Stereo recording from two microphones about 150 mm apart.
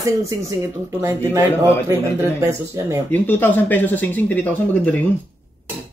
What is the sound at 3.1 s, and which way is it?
Speech, 15° left (ahead or behind).